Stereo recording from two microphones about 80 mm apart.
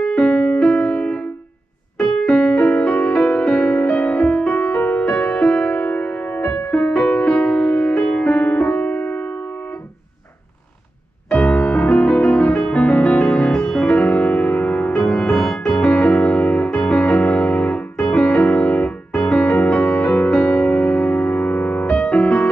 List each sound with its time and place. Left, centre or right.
0.0 s music: centre
11.3 s music: centre
12.1 s music: centre